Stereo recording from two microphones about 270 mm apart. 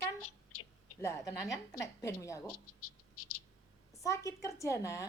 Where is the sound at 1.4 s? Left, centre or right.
Centre.